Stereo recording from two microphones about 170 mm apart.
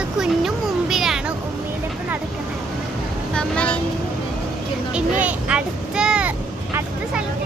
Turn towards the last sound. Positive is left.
turn(degrees=-5)  # may be behind; listen again after turning